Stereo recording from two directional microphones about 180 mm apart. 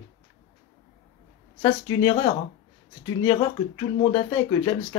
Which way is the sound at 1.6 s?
25° left (ahead or behind).